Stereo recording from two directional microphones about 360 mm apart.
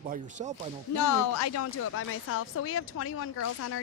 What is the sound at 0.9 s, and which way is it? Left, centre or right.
A woman's voice, left.